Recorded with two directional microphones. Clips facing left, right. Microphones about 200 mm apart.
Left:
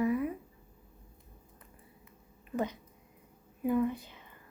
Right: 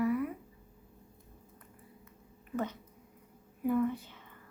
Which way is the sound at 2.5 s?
15° left (ahead or behind).